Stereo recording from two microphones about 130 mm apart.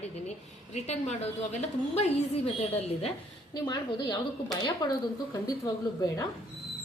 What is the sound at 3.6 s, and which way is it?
Speech, 30° left (ahead or behind).